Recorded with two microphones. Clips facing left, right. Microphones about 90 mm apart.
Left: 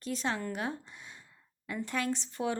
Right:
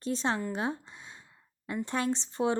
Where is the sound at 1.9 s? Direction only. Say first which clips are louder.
Right 2 dB; 30° right (ahead or behind).